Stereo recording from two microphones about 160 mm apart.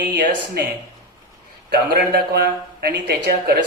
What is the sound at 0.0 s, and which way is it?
Speech, 80° right.